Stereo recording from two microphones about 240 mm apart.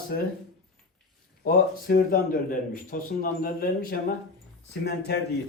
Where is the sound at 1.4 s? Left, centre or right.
Left.